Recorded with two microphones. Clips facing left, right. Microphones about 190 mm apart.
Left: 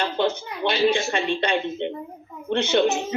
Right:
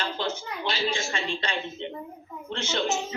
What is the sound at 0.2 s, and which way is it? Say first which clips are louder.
Speech: left 8 dB; 60° left (ahead or behind).